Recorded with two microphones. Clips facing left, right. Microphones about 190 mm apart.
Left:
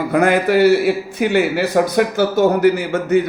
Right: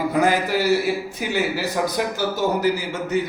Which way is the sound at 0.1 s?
65° left (ahead or behind).